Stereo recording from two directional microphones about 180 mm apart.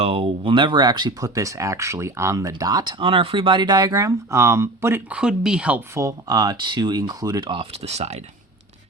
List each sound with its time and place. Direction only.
0.0 s speech: 30° right (ahead or behind)